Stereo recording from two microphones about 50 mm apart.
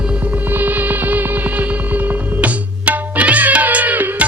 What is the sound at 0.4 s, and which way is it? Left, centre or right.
Music, right.